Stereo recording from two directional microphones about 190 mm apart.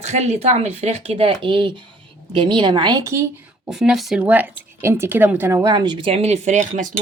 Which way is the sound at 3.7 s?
Centre (ahead or behind).